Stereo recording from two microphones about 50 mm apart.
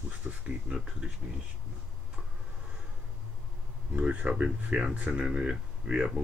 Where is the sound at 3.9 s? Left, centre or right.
Right.